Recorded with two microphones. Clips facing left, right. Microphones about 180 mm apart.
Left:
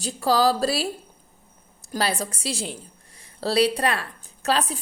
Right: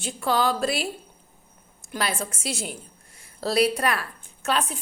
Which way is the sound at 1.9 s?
35° left (ahead or behind).